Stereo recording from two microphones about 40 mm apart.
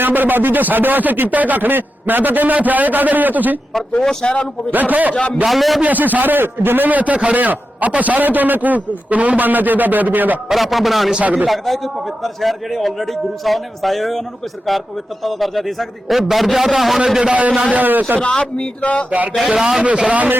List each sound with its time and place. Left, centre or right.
0.0 s a man's voice: right
1.3 s a man's voice: right
3.7 s a man's voice: centre
4.7 s a man's voice: right
5.1 s speech: left
5.5 s a man's voice: centre
5.8 s a man's voice: right
10.5 s a man's voice: centre
11.2 s a man's voice: right
11.4 s a man's voice: centre
17.7 s a man's voice: right
18.2 s speech: left
19.5 s a man's voice: centre
19.8 s a man's voice: right